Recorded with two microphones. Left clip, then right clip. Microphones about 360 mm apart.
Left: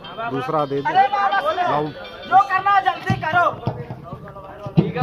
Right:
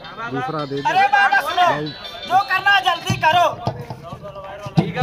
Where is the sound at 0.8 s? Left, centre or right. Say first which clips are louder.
Right 4 dB; centre.